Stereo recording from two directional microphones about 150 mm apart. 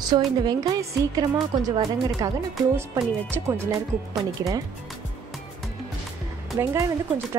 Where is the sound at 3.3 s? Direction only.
20° right (ahead or behind).